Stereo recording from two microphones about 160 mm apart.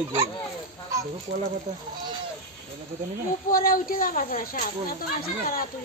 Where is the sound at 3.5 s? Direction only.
60° left (ahead or behind).